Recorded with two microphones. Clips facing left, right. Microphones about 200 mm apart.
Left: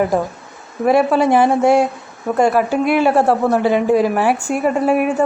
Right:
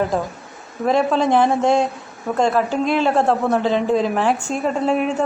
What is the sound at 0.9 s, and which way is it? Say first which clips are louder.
A woman's voice: left 4 dB; 10° left (ahead or behind).